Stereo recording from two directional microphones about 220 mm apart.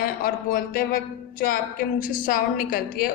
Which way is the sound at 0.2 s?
40° left (ahead or behind).